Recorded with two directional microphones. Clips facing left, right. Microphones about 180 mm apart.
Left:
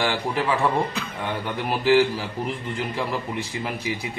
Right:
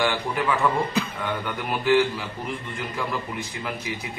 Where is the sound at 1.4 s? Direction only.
35° left (ahead or behind).